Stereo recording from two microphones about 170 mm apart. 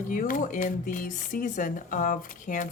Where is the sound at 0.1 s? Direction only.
50° left (ahead or behind).